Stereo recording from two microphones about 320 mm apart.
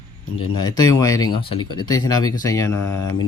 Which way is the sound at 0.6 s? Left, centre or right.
Centre.